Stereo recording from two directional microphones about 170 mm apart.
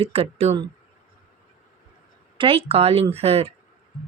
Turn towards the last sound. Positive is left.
turn(degrees=-35)  # may be behind; listen again after turning